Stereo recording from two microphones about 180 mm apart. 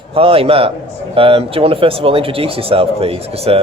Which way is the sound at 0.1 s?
30° right (ahead or behind).